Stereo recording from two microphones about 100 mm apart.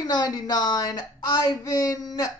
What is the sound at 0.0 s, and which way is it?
Speech, 40° left (ahead or behind).